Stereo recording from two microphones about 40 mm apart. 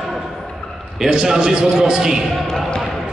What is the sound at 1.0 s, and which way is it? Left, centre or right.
A man's voice, centre.